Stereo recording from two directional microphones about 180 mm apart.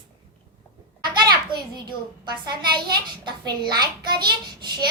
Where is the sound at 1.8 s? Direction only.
25° right (ahead or behind).